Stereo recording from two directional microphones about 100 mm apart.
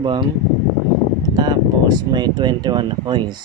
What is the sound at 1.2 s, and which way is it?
Speech, 45° right (ahead or behind).